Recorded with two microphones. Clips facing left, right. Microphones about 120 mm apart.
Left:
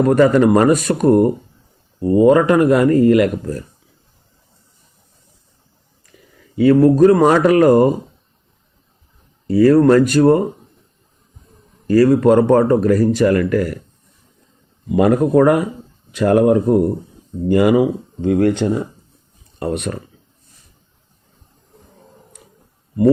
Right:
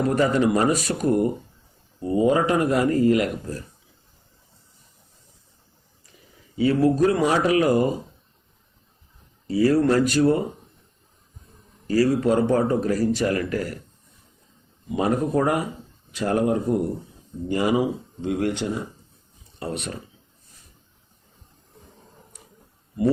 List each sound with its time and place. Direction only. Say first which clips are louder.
0.0 s speech: left 8 dB; 60° left (ahead or behind)
6.6 s speech: left 9 dB; 55° left (ahead or behind)
9.5 s speech: left 8 dB; 55° left (ahead or behind)
11.9 s speech: left 8 dB; 60° left (ahead or behind)
14.9 s speech: left 9 dB; 70° left (ahead or behind); by 20.0 s 55° left (ahead or behind)